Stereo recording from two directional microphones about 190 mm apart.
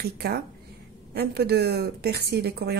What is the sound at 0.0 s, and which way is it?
A woman's voice, 55° right (ahead or behind).